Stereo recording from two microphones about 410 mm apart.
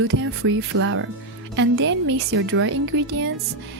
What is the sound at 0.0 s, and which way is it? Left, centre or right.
Speech, right.